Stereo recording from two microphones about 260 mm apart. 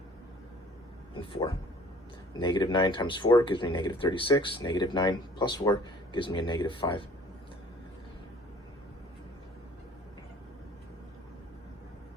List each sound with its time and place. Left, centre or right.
1.1 s speech: centre